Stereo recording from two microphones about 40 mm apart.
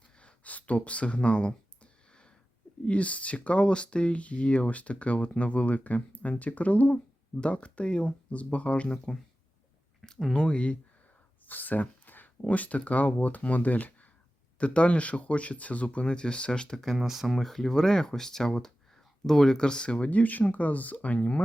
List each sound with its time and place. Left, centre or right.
0.2 s a sound: left
2.8 s speech: left
10.0 s a sound: centre
10.3 s speech: left
11.4 s a sound: left
12.4 s speech: left
14.6 s speech: left
17.0 s speech: centre; by 20.1 s left
20.1 s speech: left